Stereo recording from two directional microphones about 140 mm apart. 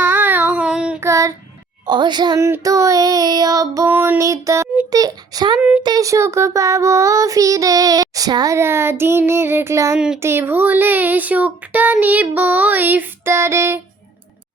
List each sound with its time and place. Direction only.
0.0 s child singing: 15° right (ahead or behind)
0.9 s child singing: 20° right (ahead or behind)
1.9 s a child's voice: 30° right (ahead or behind)
2.4 s child singing: 20° right (ahead or behind)
3.8 s child singing: 15° right (ahead or behind)
5.5 s speech: 10° right (ahead or behind)
5.8 s child singing: 25° right (ahead or behind)
10.2 s speech: 15° right (ahead or behind)